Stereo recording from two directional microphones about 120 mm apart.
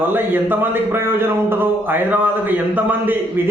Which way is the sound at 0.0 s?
15° right (ahead or behind).